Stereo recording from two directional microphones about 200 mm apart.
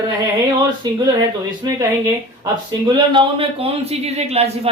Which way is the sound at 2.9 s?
25° right (ahead or behind).